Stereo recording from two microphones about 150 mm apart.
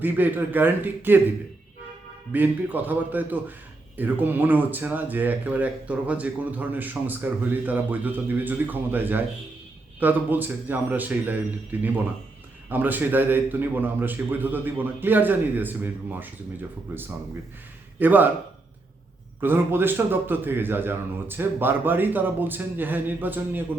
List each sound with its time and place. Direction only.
0.0 s speech: 10° right (ahead or behind)
2.3 s speech: 10° right (ahead or behind)
19.4 s speech: 15° right (ahead or behind)